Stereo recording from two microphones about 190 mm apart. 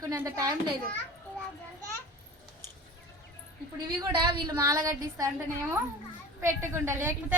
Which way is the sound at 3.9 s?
20° right (ahead or behind).